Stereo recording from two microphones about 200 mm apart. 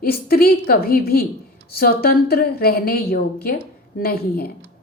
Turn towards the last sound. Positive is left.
turn(degrees=50)  # may be behind; listen again after turning